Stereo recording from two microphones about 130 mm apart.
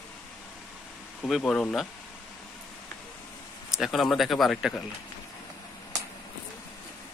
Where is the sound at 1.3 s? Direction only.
5° left (ahead or behind).